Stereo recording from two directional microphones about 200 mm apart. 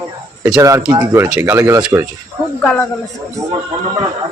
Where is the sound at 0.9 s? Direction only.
15° right (ahead or behind).